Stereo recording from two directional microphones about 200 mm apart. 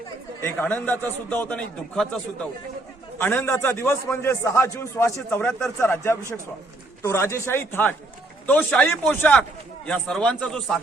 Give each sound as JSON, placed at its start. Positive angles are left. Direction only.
{"t": 0.4, "sound": "a man's voice", "side_deg": 10}